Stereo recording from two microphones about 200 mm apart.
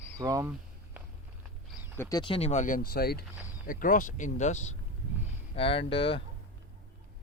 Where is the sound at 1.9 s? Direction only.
20° left (ahead or behind).